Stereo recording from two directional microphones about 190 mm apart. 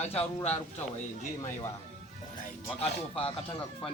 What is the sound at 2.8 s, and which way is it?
Speech, 30° left (ahead or behind).